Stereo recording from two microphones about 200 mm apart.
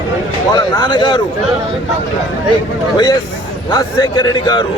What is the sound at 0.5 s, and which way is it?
Speech, 20° left (ahead or behind).